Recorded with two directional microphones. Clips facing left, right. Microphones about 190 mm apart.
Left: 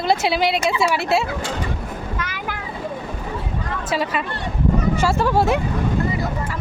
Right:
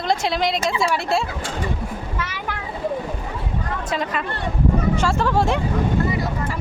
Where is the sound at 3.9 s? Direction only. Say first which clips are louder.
Left 3 dB; 5° left (ahead or behind).